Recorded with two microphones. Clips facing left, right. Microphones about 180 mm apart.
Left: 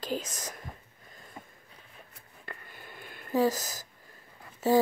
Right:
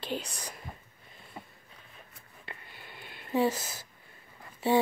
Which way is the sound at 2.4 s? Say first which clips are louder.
Left 2 dB; 45° left (ahead or behind).